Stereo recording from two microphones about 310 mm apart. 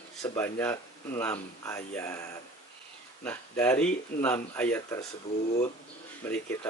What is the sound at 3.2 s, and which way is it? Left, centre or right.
Speech, centre.